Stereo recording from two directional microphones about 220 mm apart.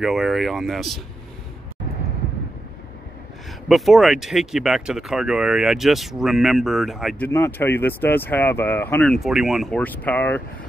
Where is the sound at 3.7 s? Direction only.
Centre (ahead or behind).